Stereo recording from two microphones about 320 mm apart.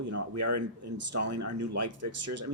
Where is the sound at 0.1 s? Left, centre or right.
Right.